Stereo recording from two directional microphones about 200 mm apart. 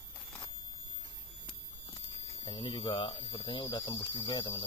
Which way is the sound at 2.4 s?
20° left (ahead or behind).